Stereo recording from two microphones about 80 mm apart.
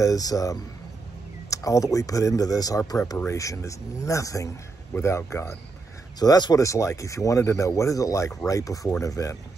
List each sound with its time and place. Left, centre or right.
0.0 s speech: left
6.1 s speech: left
6.6 s speech: left